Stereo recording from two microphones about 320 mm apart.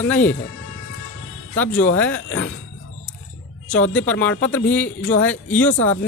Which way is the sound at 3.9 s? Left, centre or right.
Centre.